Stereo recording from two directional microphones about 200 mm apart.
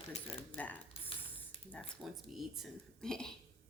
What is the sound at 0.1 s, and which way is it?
Speech, 30° left (ahead or behind).